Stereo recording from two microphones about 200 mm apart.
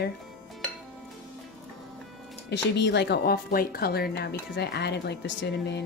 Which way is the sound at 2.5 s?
60° left (ahead or behind).